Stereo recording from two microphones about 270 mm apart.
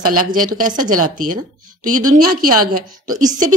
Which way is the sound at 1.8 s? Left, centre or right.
Right.